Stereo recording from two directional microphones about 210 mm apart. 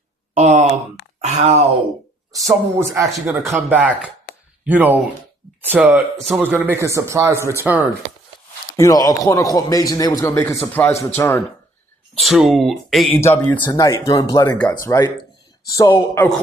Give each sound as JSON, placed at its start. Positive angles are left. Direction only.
{"t": 0.3, "sound": "sigh", "side_deg": -35}
{"t": 1.2, "sound": "speech", "side_deg": -35}
{"t": 2.3, "sound": "speech", "side_deg": -15}
{"t": 8.7, "sound": "speech", "side_deg": 15}
{"t": 12.2, "sound": "speech", "side_deg": 0}
{"t": 13.1, "sound": "speech", "side_deg": 10}